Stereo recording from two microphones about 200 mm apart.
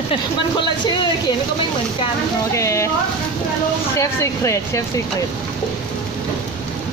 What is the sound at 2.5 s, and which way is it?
Speech, 15° left (ahead or behind).